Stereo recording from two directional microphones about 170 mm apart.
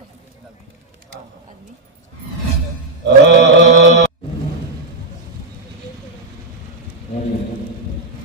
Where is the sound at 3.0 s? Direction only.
90° right.